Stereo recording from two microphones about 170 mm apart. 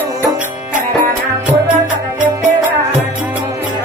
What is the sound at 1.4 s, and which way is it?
Music, 10° right (ahead or behind).